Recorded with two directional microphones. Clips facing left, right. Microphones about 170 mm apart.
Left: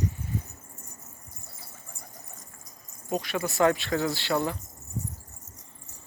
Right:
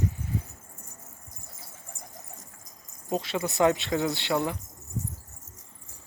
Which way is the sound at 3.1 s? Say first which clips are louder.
Even; 25° right (ahead or behind).